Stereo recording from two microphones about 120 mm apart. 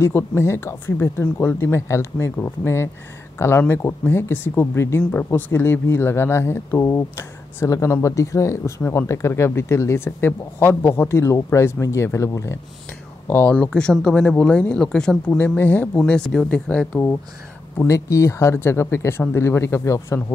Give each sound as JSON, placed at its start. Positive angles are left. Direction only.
{"t": 0.0, "sound": "speech", "side_deg": 20}
{"t": 13.5, "sound": "speech", "side_deg": 10}
{"t": 17.7, "sound": "speech", "side_deg": 25}